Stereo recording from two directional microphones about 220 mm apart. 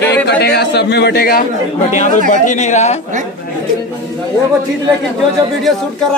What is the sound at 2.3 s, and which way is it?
Speech, 35° left (ahead or behind).